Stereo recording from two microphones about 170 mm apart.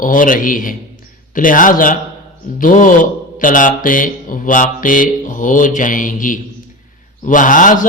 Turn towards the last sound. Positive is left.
turn(degrees=50)  # may be behind; listen again after turning